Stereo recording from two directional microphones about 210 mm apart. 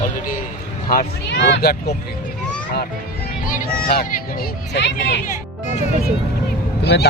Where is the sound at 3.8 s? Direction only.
45° left (ahead or behind).